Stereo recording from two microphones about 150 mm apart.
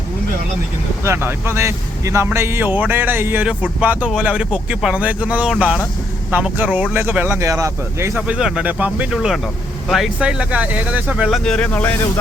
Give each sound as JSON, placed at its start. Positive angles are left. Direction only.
{"t": 1.0, "sound": "speech", "side_deg": -15}
{"t": 8.4, "sound": "speech", "side_deg": -5}